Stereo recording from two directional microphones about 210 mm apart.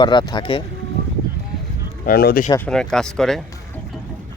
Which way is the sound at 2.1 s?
45° left (ahead or behind).